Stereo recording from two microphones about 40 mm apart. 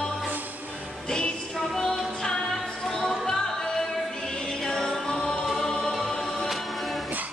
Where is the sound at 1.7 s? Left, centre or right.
Centre.